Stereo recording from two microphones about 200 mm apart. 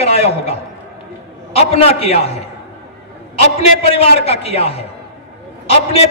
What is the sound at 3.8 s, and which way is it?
A man's voice, 30° left (ahead or behind).